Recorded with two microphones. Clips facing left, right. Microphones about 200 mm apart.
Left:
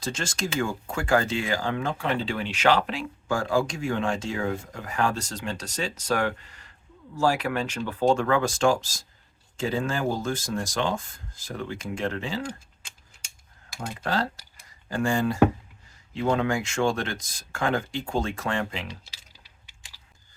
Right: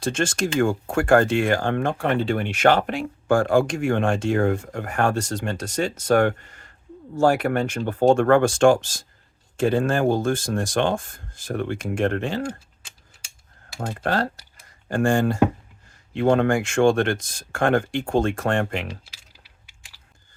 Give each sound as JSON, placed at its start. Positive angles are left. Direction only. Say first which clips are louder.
{"t": 0.2, "sound": "speech", "louder": "right 8 dB", "side_deg": -50}
{"t": 13.7, "sound": "speech", "louder": "right 4 dB", "side_deg": -55}